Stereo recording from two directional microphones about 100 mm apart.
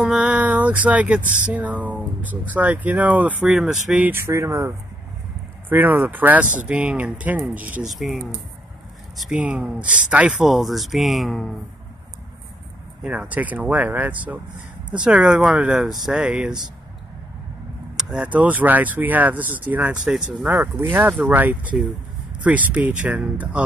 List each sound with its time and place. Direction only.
0.0 s speech: 10° right (ahead or behind)
3.4 s speech: 5° right (ahead or behind)
4.1 s speech: 30° right (ahead or behind)
5.7 s speech: 20° right (ahead or behind)
7.9 s speech: centre (ahead or behind)
9.3 s speech: 10° right (ahead or behind)
13.0 s speech: 10° right (ahead or behind)
17.9 s speech: 10° right (ahead or behind)
20.1 s speech: 5° right (ahead or behind)
20.5 s speech: 25° right (ahead or behind)